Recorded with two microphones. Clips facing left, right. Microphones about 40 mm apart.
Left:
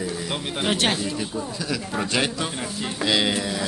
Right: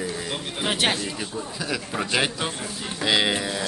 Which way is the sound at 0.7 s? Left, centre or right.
Centre.